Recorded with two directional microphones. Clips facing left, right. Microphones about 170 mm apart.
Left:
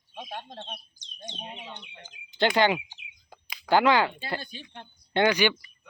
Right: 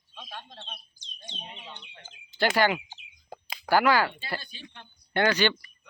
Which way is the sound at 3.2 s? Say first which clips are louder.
Right 7 dB; 40° right (ahead or behind).